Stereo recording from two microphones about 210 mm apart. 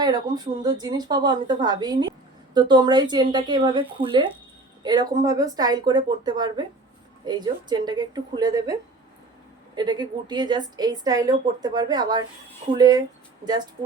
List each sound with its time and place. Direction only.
0.0 s a woman's voice: 20° right (ahead or behind)